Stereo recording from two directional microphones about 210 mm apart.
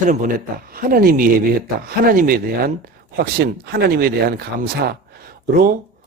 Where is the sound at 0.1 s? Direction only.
40° right (ahead or behind).